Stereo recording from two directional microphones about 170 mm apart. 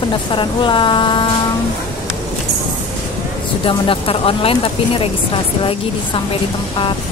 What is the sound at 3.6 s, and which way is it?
Speech, 30° left (ahead or behind).